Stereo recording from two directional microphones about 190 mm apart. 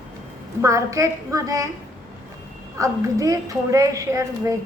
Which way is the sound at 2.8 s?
15° right (ahead or behind).